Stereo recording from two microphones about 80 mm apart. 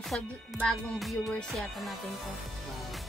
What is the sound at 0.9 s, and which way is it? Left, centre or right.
Speech, centre.